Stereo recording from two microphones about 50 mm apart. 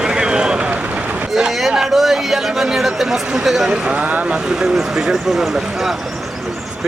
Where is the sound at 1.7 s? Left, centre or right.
Centre.